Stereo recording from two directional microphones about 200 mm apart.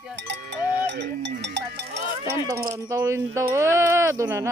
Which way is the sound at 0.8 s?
60° right (ahead or behind).